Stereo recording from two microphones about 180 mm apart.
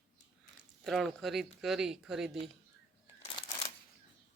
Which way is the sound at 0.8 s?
Centre (ahead or behind).